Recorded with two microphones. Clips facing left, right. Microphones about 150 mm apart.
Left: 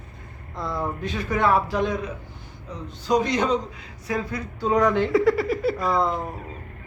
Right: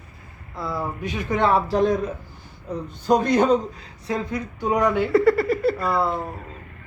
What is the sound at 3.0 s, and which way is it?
Speech, 55° right (ahead or behind).